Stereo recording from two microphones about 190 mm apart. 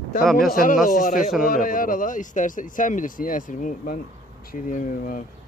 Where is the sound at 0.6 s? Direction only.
45° left (ahead or behind).